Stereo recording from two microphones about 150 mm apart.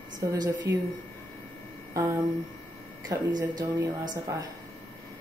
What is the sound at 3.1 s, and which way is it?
Speech, 25° right (ahead or behind).